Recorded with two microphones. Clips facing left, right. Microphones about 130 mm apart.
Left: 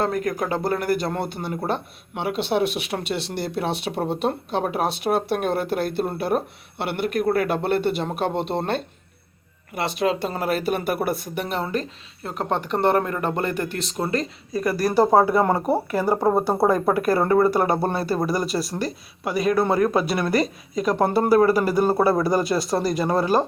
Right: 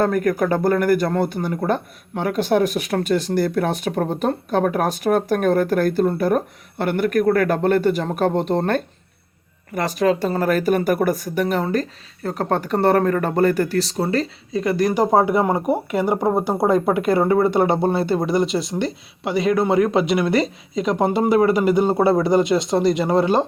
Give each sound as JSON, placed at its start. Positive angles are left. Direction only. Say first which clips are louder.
{"t": 0.0, "sound": "speech", "louder": "right 5 dB", "side_deg": -50}
{"t": 14.6, "sound": "speech", "louder": "right 1 dB", "side_deg": -20}